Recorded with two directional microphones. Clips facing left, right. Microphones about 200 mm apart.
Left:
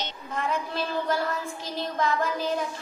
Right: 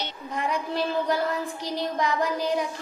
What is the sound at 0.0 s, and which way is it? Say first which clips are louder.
Child singing: right 1 dB; 15° right (ahead or behind).